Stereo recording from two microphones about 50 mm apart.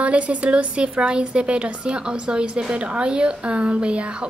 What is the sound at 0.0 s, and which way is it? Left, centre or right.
A woman's voice, right.